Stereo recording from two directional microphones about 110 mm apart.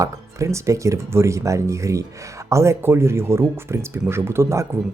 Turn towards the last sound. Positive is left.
turn(degrees=-25)  # may be behind; listen again after turning